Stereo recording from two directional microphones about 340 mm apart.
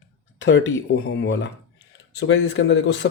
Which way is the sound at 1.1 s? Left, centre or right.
Left.